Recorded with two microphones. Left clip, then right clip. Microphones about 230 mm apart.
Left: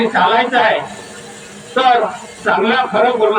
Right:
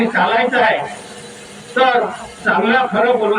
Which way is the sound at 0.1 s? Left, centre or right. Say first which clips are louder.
Left 2 dB; left.